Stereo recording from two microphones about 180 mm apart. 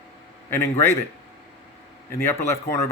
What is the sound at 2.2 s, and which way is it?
Speech, 15° left (ahead or behind).